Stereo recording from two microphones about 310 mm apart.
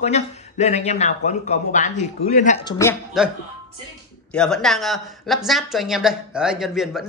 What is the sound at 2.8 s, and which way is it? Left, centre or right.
Speech, centre.